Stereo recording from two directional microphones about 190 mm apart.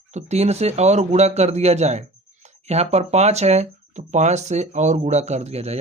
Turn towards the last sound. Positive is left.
turn(degrees=-35)  # may be behind; listen again after turning